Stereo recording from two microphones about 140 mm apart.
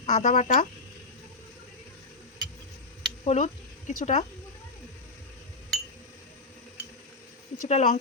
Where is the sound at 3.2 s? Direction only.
55° left (ahead or behind).